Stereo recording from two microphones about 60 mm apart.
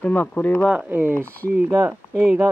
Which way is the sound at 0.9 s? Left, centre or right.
Right.